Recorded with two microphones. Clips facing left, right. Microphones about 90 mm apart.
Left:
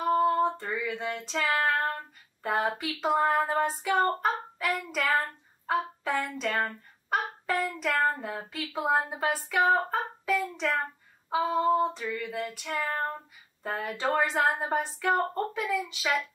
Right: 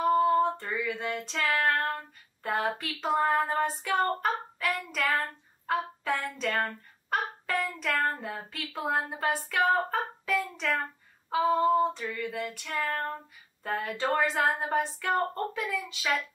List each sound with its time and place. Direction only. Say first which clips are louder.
0.1 s female singing: left 2 dB; 5° left (ahead or behind)
1.4 s speech: even; 15° left (ahead or behind)
1.7 s female singing: even; 5° left (ahead or behind)
5.7 s speech: left 1 dB; 5° left (ahead or behind)
8.2 s female singing: left 2 dB; 10° left (ahead or behind)
10.4 s speech: left 1 dB; 15° left (ahead or behind)
10.8 s female singing: left 2 dB; 5° left (ahead or behind)
13.6 s speech: right 1 dB; 5° left (ahead or behind)